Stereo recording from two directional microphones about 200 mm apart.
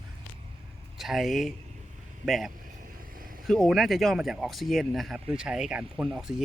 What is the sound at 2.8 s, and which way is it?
Vehicle, 45° right (ahead or behind).